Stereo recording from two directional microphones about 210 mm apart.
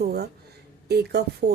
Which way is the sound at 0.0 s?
50° right (ahead or behind).